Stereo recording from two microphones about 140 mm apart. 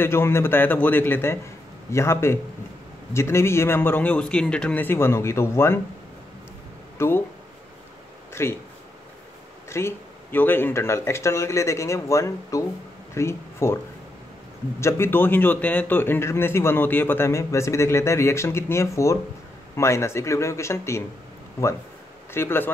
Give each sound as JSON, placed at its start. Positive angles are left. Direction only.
{"t": 0.0, "sound": "a man's voice", "side_deg": 15}
{"t": 7.0, "sound": "speech", "side_deg": 15}
{"t": 8.3, "sound": "speech", "side_deg": 20}
{"t": 9.7, "sound": "speech", "side_deg": 20}
{"t": 14.8, "sound": "a man's voice", "side_deg": 20}
{"t": 22.3, "sound": "a man's voice", "side_deg": 15}